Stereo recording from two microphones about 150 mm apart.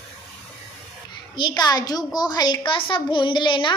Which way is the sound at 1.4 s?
30° left (ahead or behind).